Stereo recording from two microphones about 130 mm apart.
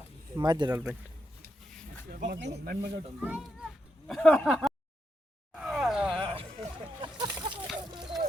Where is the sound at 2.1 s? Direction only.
90° right.